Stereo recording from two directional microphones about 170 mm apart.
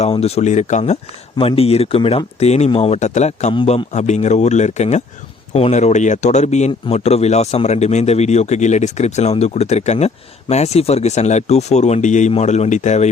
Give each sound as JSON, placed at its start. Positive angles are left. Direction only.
{"t": 0.0, "sound": "speech", "side_deg": 35}
{"t": 3.5, "sound": "speech", "side_deg": 30}